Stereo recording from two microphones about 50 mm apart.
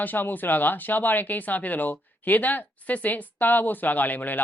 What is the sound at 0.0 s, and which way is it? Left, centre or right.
Speech, left.